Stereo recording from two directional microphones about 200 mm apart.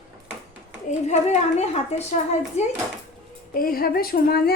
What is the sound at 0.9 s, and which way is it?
A woman's voice, 35° left (ahead or behind).